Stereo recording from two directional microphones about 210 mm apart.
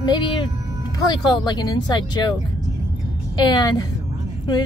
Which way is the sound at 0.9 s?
20° left (ahead or behind).